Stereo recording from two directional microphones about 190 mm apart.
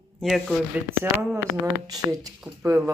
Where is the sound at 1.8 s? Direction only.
20° right (ahead or behind).